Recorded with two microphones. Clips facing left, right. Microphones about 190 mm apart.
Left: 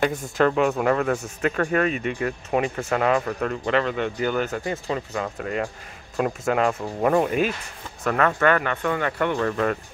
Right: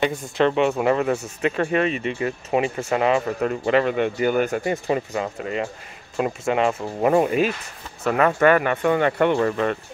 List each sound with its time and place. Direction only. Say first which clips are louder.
0.5 s speech: right 2 dB; 5° right (ahead or behind)
1.9 s speech: right 1 dB; centre (ahead or behind); by 9.5 s 20° right (ahead or behind)
9.5 s speech: right 1 dB; centre (ahead or behind)